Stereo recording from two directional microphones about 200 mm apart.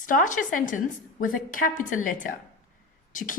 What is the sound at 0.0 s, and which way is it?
A woman's voice, 40° left (ahead or behind).